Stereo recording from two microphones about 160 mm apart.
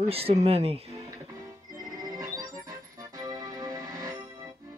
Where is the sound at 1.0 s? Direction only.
20° right (ahead or behind).